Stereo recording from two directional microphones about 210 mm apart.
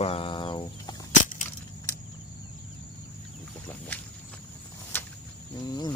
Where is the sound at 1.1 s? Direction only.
40° left (ahead or behind).